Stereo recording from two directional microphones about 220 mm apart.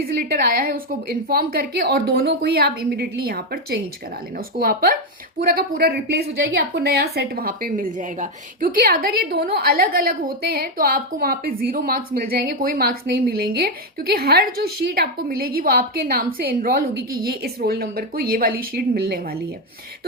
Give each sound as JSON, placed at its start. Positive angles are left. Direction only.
{"t": 0.0, "sound": "a woman's voice", "side_deg": -40}